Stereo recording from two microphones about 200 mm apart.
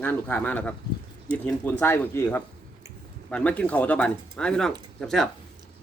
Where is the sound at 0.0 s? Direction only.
10° left (ahead or behind).